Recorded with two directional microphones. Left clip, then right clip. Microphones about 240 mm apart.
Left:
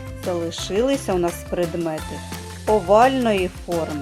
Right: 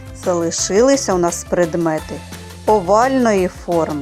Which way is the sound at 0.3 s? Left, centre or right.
Right.